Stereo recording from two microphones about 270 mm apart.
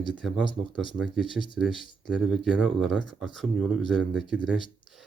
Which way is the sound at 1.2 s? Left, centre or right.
Centre.